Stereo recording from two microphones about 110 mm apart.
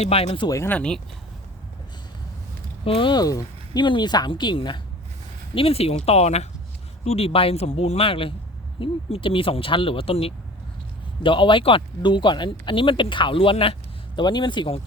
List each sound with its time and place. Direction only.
0.0 s speech: 60° left (ahead or behind)
0.4 s speech: 30° left (ahead or behind)
0.7 s speech: 10° left (ahead or behind)
2.8 s speech: 55° left (ahead or behind)
5.5 s speech: 60° left (ahead or behind); by 6.5 s 80° left
7.0 s speech: 70° left (ahead or behind)
11.2 s speech: 50° left (ahead or behind)
14.2 s speech: 40° left (ahead or behind)